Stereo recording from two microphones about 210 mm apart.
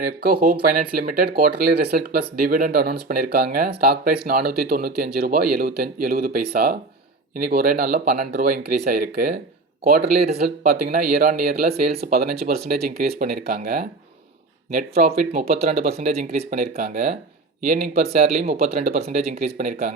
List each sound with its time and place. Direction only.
0.2 s speech: 45° right (ahead or behind)
15.1 s speech: 35° right (ahead or behind)
17.7 s speech: 35° right (ahead or behind)